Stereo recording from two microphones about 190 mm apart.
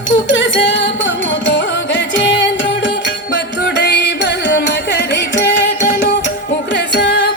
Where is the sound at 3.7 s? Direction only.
65° left (ahead or behind).